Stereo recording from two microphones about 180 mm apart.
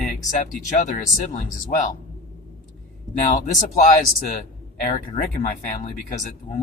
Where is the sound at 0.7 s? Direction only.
40° left (ahead or behind).